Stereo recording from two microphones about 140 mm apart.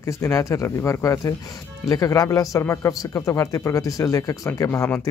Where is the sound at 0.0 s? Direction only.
20° left (ahead or behind).